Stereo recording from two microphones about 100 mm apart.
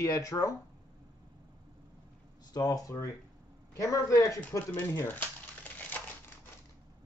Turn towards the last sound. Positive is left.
turn(degrees=20)  # may be behind; listen again after turning